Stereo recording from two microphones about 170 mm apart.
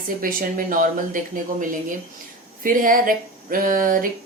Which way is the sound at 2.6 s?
55° right (ahead or behind).